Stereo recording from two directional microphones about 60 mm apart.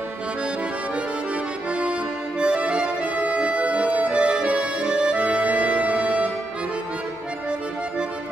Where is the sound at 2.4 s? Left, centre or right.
Centre.